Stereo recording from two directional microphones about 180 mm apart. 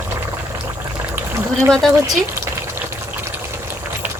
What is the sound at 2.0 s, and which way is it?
Water, 15° right (ahead or behind).